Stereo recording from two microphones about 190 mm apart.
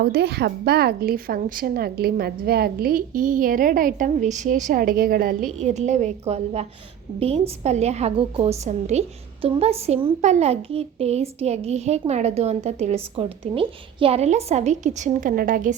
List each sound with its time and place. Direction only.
0.1 s a woman's voice: 55° right (ahead or behind)